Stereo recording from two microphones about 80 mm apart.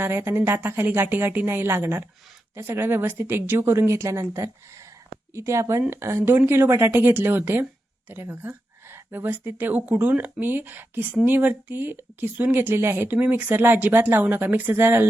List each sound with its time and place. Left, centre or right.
0.0 s speech: right